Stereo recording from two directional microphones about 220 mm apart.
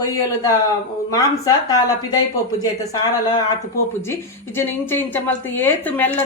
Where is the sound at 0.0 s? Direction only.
15° left (ahead or behind).